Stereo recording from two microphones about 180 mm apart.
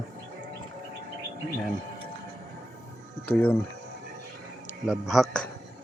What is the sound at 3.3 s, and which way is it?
Speech, 10° left (ahead or behind).